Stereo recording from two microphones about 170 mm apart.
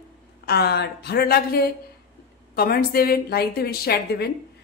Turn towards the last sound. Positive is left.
turn(degrees=70)  # may be behind; listen again after turning